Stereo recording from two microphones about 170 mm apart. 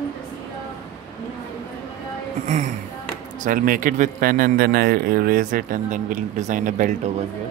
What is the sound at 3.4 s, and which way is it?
Speech, 55° right (ahead or behind).